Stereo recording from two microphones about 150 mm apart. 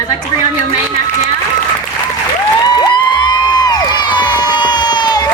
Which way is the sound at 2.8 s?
30° left (ahead or behind).